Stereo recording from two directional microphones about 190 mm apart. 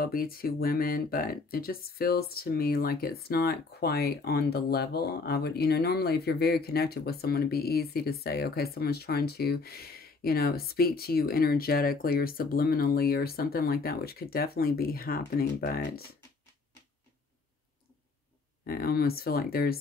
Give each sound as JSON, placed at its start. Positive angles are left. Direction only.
{"t": 0.0, "sound": "speech", "side_deg": 50}
{"t": 18.7, "sound": "speech", "side_deg": 55}